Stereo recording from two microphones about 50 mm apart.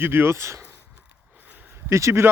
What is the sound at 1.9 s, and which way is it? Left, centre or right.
Speech, right.